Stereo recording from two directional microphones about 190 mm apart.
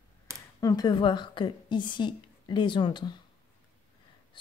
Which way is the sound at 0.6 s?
20° left (ahead or behind).